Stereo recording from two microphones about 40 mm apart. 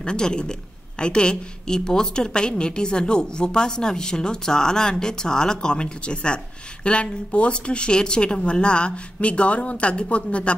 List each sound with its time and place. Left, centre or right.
0.0 s a woman's voice: left